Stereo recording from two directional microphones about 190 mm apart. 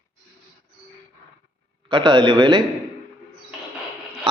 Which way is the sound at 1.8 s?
25° right (ahead or behind).